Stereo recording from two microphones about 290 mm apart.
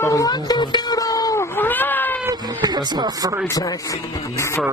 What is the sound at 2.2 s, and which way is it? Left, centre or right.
Speech, centre.